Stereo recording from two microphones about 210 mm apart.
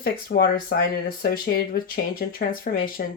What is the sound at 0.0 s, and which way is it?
Speech, 45° left (ahead or behind).